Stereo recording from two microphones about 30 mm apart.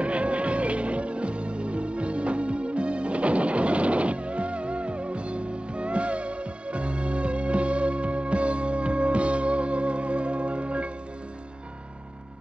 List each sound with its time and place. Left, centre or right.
0.0 s music: right